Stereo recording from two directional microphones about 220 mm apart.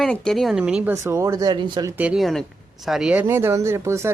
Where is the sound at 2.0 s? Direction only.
5° right (ahead or behind).